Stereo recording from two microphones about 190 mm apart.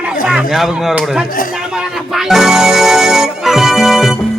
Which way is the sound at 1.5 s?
5° right (ahead or behind).